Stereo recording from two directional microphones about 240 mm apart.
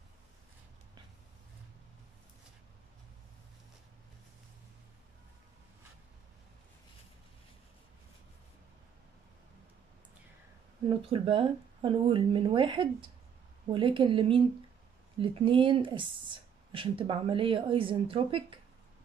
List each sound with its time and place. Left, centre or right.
10.9 s speech: right